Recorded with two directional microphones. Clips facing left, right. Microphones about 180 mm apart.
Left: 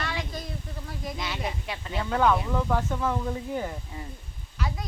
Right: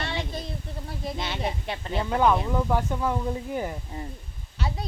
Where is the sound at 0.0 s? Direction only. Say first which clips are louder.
Right 2 dB; 25° right (ahead or behind).